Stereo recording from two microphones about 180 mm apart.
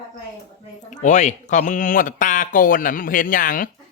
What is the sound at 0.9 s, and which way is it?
Speech, 40° left (ahead or behind).